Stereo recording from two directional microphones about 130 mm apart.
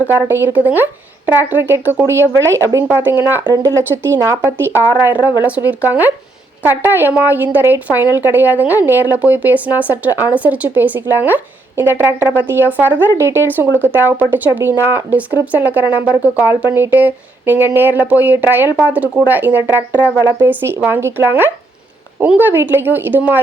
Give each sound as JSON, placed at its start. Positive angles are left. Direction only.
{"t": 0.1, "sound": "speech", "side_deg": -15}